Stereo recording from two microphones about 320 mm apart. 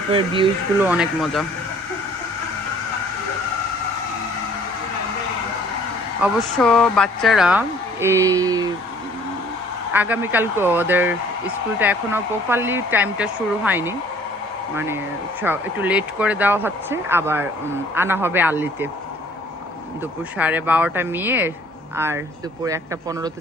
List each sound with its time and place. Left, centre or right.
0.1 s speech: centre
0.9 s speech: centre
6.2 s speech: centre
9.9 s speech: centre
20.4 s speech: centre